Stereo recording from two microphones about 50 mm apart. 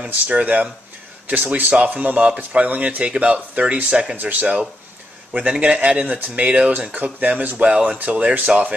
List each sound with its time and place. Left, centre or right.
0.0 s speech: right
4.2 s speech: right